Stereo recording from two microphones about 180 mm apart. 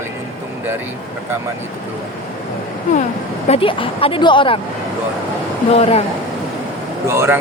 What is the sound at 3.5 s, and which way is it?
Speech, 30° left (ahead or behind).